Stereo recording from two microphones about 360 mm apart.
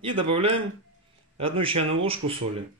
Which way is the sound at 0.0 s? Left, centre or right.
Centre.